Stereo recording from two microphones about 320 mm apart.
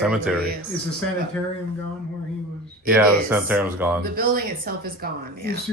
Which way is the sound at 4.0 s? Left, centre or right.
Right.